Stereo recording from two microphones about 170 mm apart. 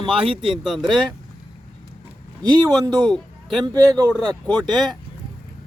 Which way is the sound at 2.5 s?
25° right (ahead or behind).